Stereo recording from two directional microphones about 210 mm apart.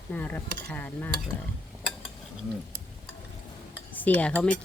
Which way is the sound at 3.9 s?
5° left (ahead or behind).